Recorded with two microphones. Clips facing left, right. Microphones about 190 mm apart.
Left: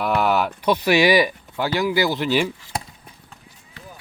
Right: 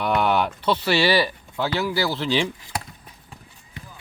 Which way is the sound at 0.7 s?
15° left (ahead or behind).